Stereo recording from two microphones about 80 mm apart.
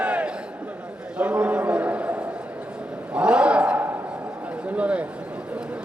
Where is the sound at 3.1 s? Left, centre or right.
Centre.